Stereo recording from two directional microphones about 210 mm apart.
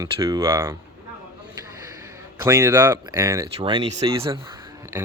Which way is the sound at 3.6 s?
25° right (ahead or behind).